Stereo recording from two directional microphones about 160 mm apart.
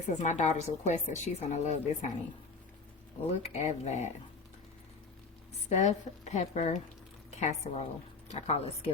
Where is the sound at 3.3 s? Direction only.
40° left (ahead or behind).